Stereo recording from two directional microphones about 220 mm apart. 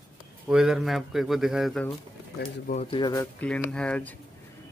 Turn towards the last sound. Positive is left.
turn(degrees=5)  # may be behind; listen again after turning